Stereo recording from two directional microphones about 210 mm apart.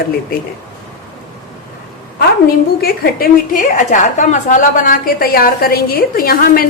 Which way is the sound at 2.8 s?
45° left (ahead or behind).